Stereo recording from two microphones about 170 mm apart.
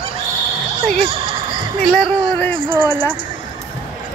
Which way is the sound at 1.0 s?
30° right (ahead or behind).